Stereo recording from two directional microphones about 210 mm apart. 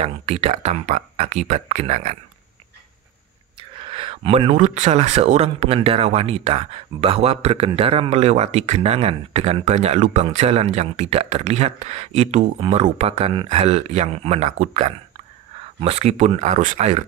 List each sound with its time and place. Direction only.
0.0 s speech: 30° right (ahead or behind)
3.5 s speech: 25° right (ahead or behind)